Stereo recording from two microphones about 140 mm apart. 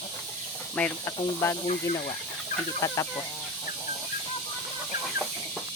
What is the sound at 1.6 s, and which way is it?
Speech, 50° left (ahead or behind).